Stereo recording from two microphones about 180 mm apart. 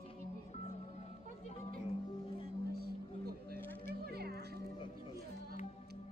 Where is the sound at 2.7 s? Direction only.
60° right (ahead or behind).